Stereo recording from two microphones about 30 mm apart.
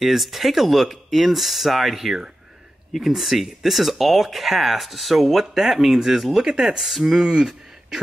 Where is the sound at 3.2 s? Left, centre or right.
Centre.